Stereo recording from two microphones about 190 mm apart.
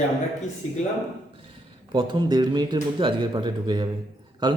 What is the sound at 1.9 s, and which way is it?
Speech, 20° right (ahead or behind).